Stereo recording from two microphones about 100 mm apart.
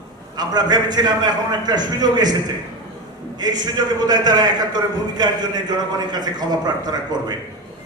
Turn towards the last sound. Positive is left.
turn(degrees=-45)  # may be behind; listen again after turning